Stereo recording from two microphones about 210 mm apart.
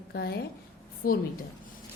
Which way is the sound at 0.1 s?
50° left (ahead or behind).